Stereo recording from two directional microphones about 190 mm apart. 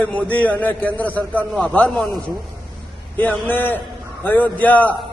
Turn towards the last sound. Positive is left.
turn(degrees=10)  # may be behind; listen again after turning